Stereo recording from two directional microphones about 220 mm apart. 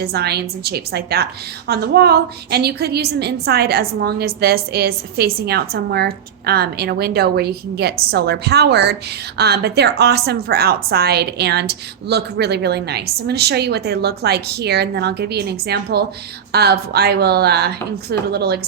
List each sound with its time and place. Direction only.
0.0 s a woman's voice: 45° right (ahead or behind)